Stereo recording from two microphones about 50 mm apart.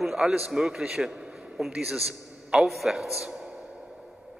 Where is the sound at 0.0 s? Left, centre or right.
Centre.